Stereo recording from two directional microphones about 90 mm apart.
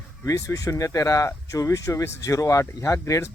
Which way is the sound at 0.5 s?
40° left (ahead or behind).